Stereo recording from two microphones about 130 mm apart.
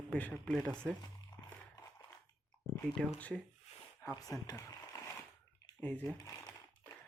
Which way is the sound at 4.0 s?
25° left (ahead or behind).